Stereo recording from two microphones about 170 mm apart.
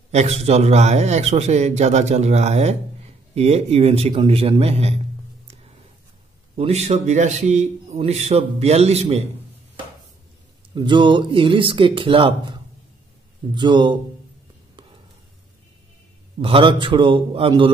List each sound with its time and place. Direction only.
0.1 s a man's voice: 40° right (ahead or behind)
6.5 s a man's voice: 40° right (ahead or behind)
10.7 s a man's voice: 25° right (ahead or behind)
13.6 s a man's voice: 25° right (ahead or behind)
16.3 s a man's voice: 30° right (ahead or behind)